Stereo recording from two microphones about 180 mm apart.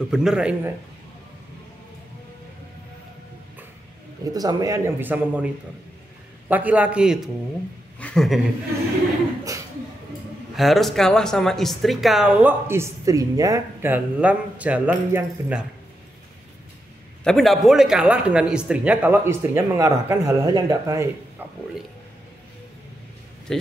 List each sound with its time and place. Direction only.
0.1 s speech: 5° right (ahead or behind)
4.2 s a man's voice: 20° right (ahead or behind)
6.5 s a man's voice: 10° right (ahead or behind)
10.5 s speech: centre (ahead or behind)
17.2 s a man's voice: centre (ahead or behind); by 21.1 s 20° right (ahead or behind)
23.5 s speech: 5° left (ahead or behind)